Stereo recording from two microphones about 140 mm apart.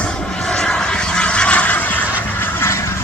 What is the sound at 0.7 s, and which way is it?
Vehicle, 5° left (ahead or behind).